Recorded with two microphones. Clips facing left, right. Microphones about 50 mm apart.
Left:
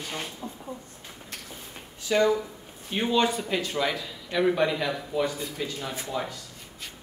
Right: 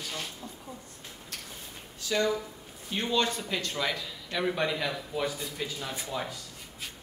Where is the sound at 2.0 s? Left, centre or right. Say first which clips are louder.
Left 5 dB; left.